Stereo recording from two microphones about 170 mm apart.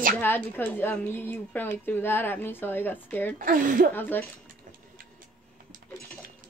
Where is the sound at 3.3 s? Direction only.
50° right (ahead or behind).